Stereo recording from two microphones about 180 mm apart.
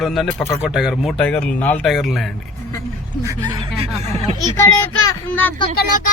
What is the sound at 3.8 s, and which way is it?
Speech, 40° right (ahead or behind).